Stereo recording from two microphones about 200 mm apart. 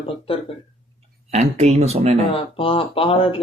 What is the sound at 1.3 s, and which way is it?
Speech, 35° right (ahead or behind).